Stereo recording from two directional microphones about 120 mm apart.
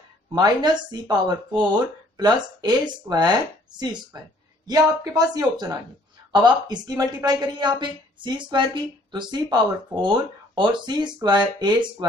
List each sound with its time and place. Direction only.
0.3 s a woman's voice: 35° right (ahead or behind)